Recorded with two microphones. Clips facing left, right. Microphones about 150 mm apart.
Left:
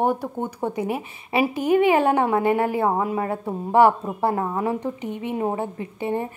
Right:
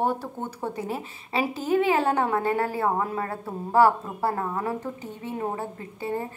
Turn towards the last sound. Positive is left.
turn(degrees=20)  # may be behind; listen again after turning